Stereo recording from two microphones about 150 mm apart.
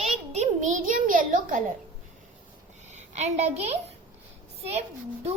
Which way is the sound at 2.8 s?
50° right (ahead or behind).